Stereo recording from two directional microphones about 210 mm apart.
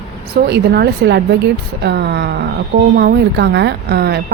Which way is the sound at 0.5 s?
50° right (ahead or behind).